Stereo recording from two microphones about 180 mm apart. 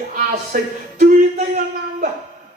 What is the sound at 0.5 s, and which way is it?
Speech, 50° right (ahead or behind).